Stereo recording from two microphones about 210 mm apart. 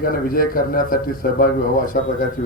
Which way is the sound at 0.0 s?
45° left (ahead or behind).